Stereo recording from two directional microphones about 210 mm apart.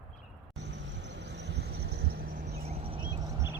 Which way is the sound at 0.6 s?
55° right (ahead or behind).